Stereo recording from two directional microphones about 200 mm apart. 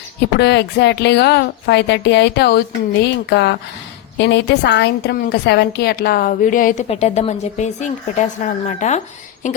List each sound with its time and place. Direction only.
0.3 s a woman's voice: 60° left (ahead or behind); by 6.8 s 40° left (ahead or behind)
6.8 s a woman's voice: 30° left (ahead or behind)